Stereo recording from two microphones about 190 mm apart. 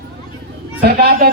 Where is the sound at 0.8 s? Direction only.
55° right (ahead or behind).